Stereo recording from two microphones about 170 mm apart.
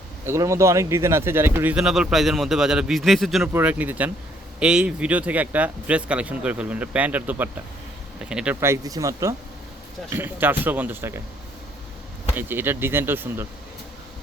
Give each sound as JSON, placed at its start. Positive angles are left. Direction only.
{"t": 0.3, "sound": "speech", "side_deg": -15}
{"t": 8.6, "sound": "speech", "side_deg": -20}
{"t": 12.4, "sound": "speech", "side_deg": -10}